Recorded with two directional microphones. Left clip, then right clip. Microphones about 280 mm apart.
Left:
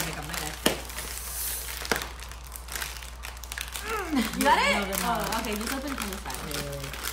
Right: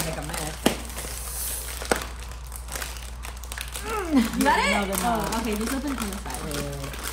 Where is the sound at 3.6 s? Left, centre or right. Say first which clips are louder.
Right 2 dB; centre.